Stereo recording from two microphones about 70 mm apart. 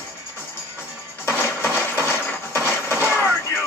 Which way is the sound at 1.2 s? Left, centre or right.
Left.